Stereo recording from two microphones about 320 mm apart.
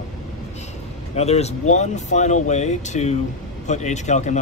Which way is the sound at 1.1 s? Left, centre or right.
Centre.